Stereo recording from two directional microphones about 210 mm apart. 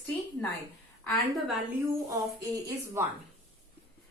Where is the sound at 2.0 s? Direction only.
15° right (ahead or behind).